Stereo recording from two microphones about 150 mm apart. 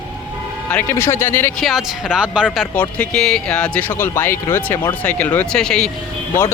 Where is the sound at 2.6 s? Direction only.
10° left (ahead or behind).